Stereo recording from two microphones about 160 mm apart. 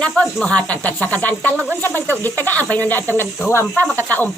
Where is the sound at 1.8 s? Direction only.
10° left (ahead or behind).